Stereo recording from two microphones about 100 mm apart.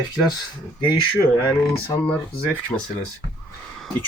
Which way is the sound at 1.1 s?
25° left (ahead or behind).